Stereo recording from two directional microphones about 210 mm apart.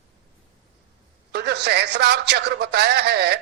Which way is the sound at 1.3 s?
50° right (ahead or behind).